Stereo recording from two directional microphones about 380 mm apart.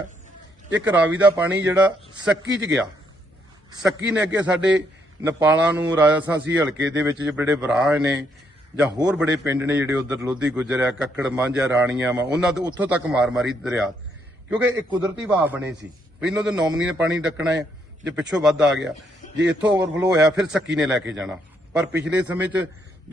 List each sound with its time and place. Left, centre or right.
0.7 s a man's voice: centre
3.7 s a man's voice: centre